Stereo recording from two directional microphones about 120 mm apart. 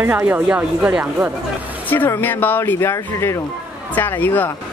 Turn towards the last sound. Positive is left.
turn(degrees=15)  # may be behind; listen again after turning